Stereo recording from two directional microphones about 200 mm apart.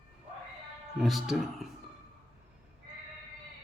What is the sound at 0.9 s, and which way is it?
Speech, centre (ahead or behind).